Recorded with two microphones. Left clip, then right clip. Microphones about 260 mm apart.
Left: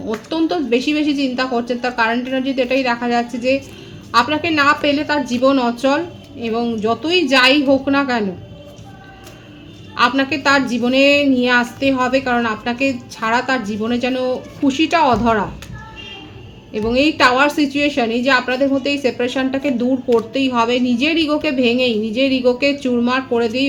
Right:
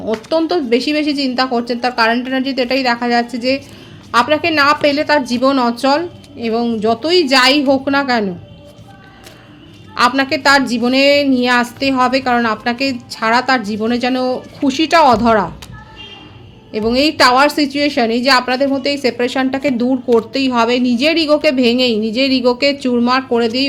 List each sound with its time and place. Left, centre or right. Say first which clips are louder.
0.0 s a woman's voice: right 4 dB; right
9.9 s a woman's voice: right 2 dB; right
16.7 s a woman's voice: right 2 dB; right